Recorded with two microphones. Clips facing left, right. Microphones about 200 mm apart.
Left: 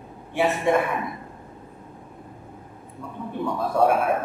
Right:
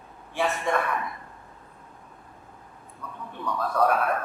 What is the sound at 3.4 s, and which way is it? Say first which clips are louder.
Speech: left 4 dB; 25° left (ahead or behind).